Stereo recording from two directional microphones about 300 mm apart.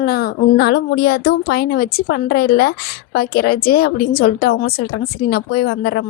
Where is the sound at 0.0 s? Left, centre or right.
Left.